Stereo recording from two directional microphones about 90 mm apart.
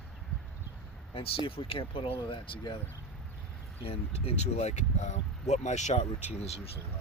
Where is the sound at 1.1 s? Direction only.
90° left; by 2.8 s 65° left (ahead or behind).